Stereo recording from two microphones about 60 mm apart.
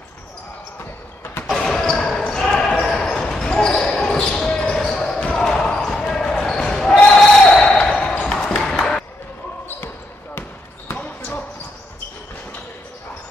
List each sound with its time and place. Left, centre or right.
1.6 s basketball bounce: centre
7.1 s a sound: centre
11.0 s basketball bounce: left